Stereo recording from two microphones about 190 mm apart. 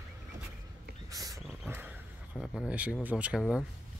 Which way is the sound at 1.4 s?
5° right (ahead or behind).